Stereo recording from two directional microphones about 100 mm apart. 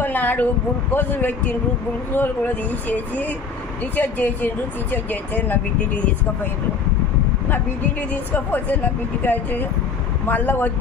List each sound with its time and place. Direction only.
0.0 s a woman's voice: 20° left (ahead or behind)
8.1 s a woman's voice: 15° left (ahead or behind)